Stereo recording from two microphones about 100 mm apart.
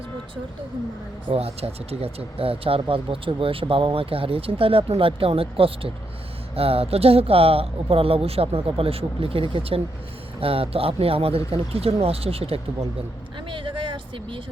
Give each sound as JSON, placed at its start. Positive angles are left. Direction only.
{"t": 1.3, "sound": "speech", "side_deg": -90}
{"t": 13.5, "sound": "vehicle", "side_deg": -55}